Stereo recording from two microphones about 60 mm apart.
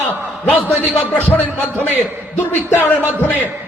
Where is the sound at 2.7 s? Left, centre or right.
Left.